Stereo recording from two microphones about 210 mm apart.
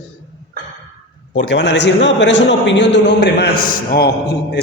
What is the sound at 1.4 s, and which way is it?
A man's voice, 55° left (ahead or behind).